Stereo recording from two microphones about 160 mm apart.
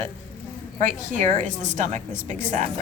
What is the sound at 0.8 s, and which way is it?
A woman's voice, 50° right (ahead or behind).